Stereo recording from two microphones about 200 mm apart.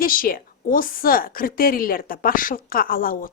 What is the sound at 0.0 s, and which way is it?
A woman's voice, 45° left (ahead or behind).